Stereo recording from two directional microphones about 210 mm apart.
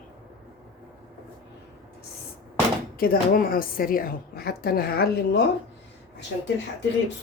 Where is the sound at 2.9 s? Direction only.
45° left (ahead or behind).